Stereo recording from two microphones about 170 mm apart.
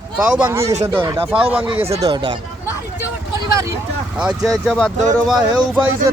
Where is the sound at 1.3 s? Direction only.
30° right (ahead or behind).